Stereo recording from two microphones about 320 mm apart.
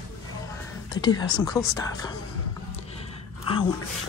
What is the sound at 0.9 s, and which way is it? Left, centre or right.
Speech, centre.